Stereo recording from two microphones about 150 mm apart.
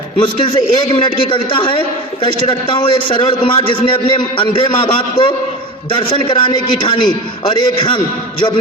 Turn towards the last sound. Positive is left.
turn(degrees=30)  # may be behind; listen again after turning